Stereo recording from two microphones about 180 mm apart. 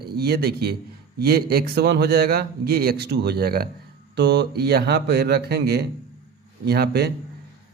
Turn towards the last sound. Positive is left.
turn(degrees=-65)  # may be behind; listen again after turning